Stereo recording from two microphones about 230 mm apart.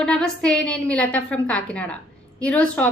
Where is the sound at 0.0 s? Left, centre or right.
Centre.